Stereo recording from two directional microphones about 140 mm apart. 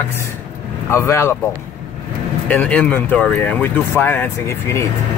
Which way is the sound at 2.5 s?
10° left (ahead or behind).